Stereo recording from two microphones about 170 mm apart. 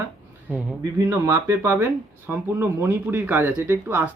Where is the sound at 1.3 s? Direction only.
15° right (ahead or behind).